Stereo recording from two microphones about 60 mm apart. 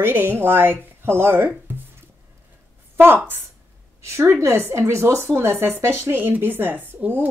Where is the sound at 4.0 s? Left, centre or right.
Right.